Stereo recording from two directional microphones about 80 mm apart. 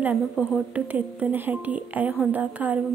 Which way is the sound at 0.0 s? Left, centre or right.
Right.